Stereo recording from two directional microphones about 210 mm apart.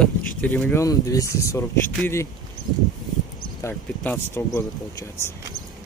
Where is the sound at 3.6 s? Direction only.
10° left (ahead or behind).